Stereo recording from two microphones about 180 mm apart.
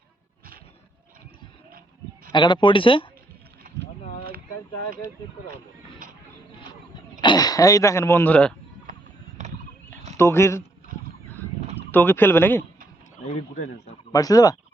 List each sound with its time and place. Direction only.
2.3 s speech: 25° left (ahead or behind)
4.0 s boat: 35° left (ahead or behind)
6.9 s speech: 25° left (ahead or behind); by 8.5 s 10° left (ahead or behind)
10.2 s speech: 15° left (ahead or behind)
11.9 s speech: 10° left (ahead or behind)
13.2 s speech: 40° left (ahead or behind)
14.1 s speech: 20° left (ahead or behind)